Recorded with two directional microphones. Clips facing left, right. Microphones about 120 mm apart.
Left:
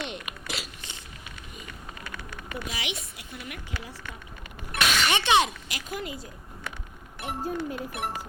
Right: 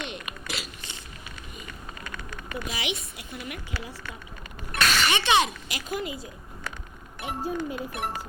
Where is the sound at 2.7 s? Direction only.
15° right (ahead or behind).